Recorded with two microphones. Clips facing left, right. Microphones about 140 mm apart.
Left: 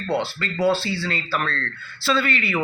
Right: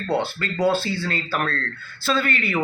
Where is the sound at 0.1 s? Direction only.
50° right (ahead or behind).